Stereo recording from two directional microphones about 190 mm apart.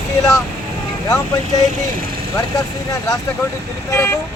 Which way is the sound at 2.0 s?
55° right (ahead or behind).